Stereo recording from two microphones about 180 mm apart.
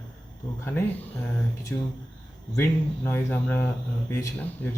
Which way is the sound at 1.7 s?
10° left (ahead or behind).